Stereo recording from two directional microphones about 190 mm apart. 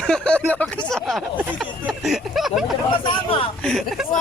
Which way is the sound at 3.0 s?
30° left (ahead or behind).